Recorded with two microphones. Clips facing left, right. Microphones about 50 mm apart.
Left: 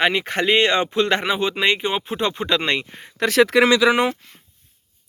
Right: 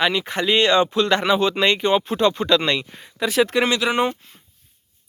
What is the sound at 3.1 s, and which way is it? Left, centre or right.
Speech, left.